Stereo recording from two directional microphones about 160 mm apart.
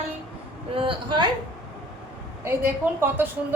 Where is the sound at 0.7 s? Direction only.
35° right (ahead or behind).